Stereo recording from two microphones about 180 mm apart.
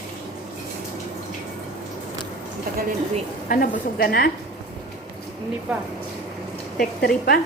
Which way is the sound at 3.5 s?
55° left (ahead or behind).